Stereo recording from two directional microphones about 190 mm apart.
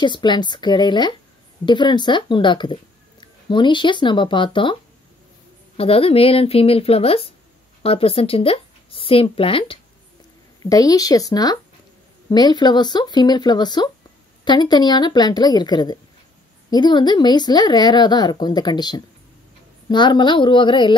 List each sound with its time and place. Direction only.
0.0 s speech: 25° left (ahead or behind)
5.8 s speech: 30° left (ahead or behind)